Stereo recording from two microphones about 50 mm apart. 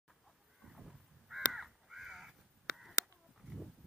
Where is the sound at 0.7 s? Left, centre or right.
Centre.